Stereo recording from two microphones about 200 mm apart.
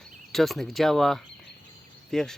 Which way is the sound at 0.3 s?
Centre (ahead or behind).